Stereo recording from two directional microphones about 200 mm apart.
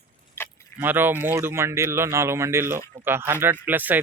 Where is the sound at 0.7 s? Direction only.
10° right (ahead or behind).